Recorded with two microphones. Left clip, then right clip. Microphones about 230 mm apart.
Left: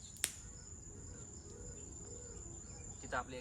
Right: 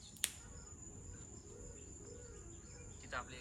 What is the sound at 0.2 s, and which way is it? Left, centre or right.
Cricket, left.